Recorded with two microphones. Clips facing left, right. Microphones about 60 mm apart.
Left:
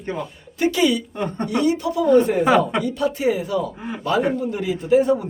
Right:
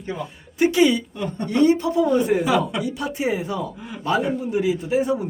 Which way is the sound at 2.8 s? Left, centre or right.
Centre.